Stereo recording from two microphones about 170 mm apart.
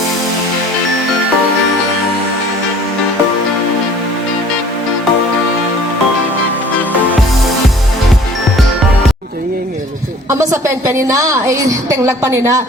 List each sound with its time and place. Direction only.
10.2 s a woman's voice: 20° right (ahead or behind)